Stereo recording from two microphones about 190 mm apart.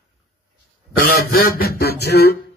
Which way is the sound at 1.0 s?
50° left (ahead or behind).